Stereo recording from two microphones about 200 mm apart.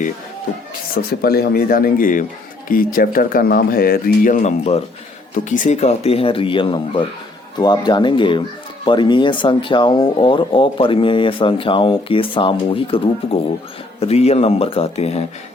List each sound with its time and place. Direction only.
1.2 s speech: 50° left (ahead or behind); by 15.2 s 30° left (ahead or behind)